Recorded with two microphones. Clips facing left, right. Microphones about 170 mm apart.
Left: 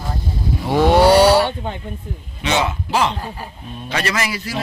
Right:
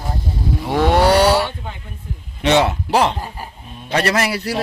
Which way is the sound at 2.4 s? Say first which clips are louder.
Right 5 dB; 65° right (ahead or behind).